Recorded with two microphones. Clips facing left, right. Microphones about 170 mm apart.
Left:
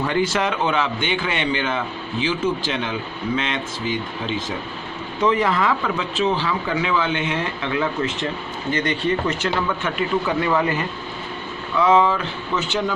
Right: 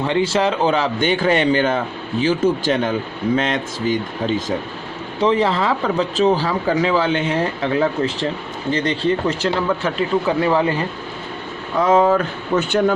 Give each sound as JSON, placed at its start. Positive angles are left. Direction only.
{"t": 0.0, "sound": "speech", "side_deg": -30}
{"t": 5.2, "sound": "speech", "side_deg": -30}
{"t": 11.8, "sound": "speech", "side_deg": -45}